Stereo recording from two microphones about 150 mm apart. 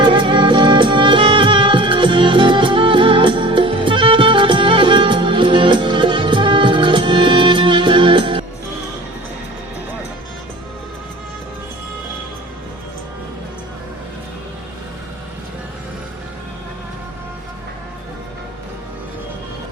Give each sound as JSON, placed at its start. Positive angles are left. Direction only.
{"t": 0.0, "sound": "music", "side_deg": -30}